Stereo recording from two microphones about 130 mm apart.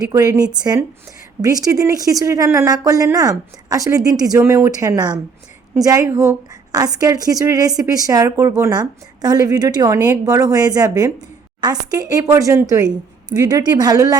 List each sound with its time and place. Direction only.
0.0 s speech: 30° right (ahead or behind)